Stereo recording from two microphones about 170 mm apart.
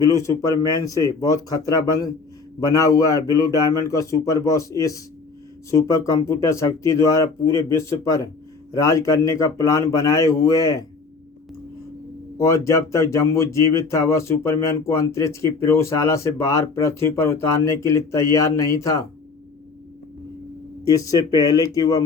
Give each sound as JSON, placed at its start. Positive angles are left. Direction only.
{"t": 0.0, "sound": "a man's voice", "side_deg": 20}
{"t": 12.4, "sound": "speech", "side_deg": 15}
{"t": 20.8, "sound": "a man's voice", "side_deg": 20}